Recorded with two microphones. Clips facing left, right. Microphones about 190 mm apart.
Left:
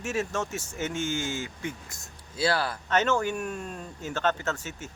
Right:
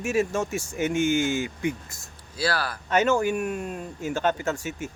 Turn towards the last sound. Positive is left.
turn(degrees=-10)  # may be behind; listen again after turning